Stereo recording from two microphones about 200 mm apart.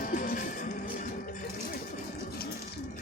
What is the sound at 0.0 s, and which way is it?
Music, 40° left (ahead or behind).